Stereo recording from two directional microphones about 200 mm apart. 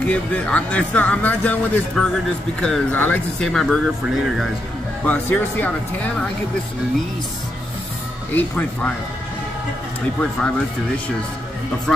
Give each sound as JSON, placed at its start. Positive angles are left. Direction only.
{"t": 0.0, "sound": "speech", "side_deg": 5}
{"t": 5.0, "sound": "speech", "side_deg": 10}
{"t": 8.4, "sound": "speech", "side_deg": 10}